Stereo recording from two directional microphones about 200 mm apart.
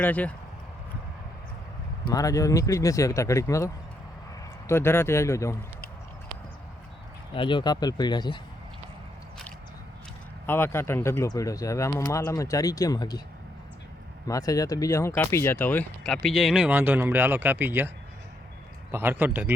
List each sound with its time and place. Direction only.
0.0 s speech: 10° left (ahead or behind)
2.0 s speech: 15° left (ahead or behind)
7.3 s speech: 25° left (ahead or behind)
10.4 s speech: 10° left (ahead or behind)
14.3 s a man's voice: 15° left (ahead or behind); by 19.5 s 10° right (ahead or behind)